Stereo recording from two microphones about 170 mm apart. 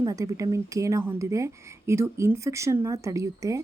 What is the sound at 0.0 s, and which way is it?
A woman's voice, 20° right (ahead or behind).